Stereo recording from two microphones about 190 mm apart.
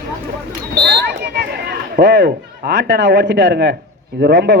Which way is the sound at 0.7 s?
60° right (ahead or behind).